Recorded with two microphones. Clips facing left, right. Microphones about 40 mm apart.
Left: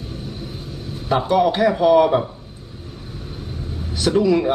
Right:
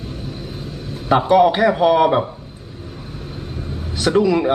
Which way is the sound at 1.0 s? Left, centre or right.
Centre.